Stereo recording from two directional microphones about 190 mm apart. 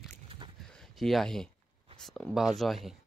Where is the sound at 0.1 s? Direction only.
30° right (ahead or behind).